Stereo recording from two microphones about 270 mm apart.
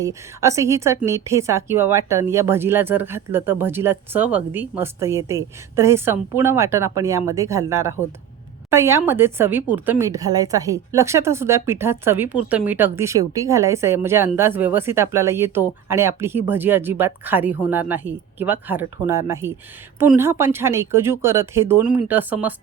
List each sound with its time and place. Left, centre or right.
0.0 s speech: centre